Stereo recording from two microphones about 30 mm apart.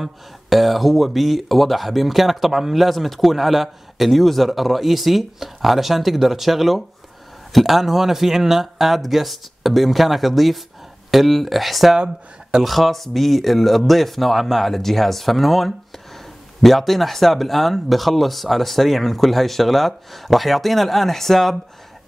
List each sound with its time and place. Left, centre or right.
0.0 s speech: centre
12.0 s speech: right
12.6 s speech: centre